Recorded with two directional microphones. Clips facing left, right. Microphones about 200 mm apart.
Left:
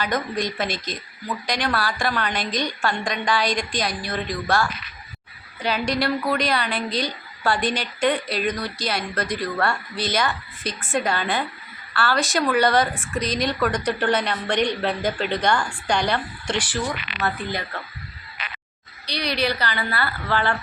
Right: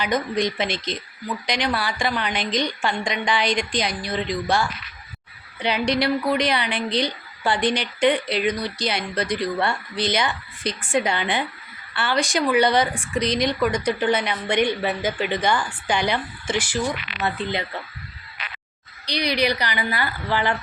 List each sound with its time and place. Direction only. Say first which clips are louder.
0.0 s a woman's voice: right 2 dB; 20° right (ahead or behind)
17.2 s a woman's voice: even; 20° right (ahead or behind)
19.0 s a woman's voice: right 2 dB; 15° right (ahead or behind)